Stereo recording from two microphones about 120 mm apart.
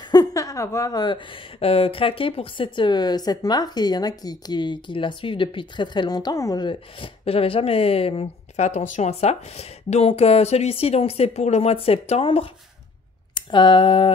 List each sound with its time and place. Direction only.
0.1 s a woman's voice: 30° left (ahead or behind); by 12.4 s 50° left (ahead or behind)
13.3 s speech: 40° left (ahead or behind)